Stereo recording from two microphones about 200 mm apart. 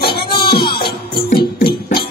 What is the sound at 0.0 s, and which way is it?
Music, 50° left (ahead or behind).